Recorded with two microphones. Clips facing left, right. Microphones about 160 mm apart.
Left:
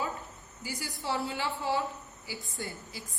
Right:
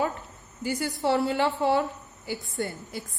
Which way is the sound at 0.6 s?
60° right (ahead or behind).